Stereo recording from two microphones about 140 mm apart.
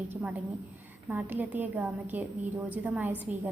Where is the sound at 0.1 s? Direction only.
20° right (ahead or behind).